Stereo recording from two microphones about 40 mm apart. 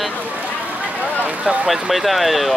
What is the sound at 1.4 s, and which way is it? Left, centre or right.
Speech, centre.